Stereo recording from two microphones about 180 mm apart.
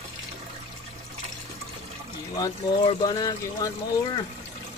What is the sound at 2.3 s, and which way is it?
Speech, 25° left (ahead or behind).